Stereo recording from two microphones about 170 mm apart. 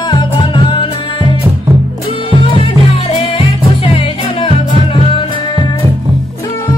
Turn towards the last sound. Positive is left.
turn(degrees=35)  # may be behind; listen again after turning